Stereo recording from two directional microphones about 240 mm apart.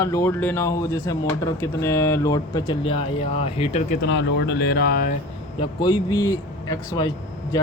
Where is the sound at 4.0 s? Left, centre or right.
Left.